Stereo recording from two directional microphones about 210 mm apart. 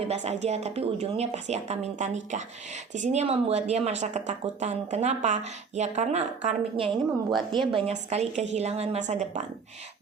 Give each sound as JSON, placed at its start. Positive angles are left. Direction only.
{"t": 0.1, "sound": "a woman's voice", "side_deg": -30}